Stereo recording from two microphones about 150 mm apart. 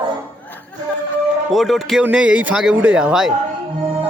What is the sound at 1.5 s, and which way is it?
Speech, centre (ahead or behind).